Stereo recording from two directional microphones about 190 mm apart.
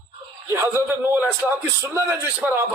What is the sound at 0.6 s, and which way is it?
A man's voice, 10° right (ahead or behind).